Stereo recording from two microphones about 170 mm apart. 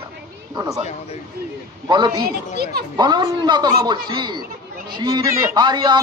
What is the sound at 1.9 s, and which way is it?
A man's voice, 25° right (ahead or behind).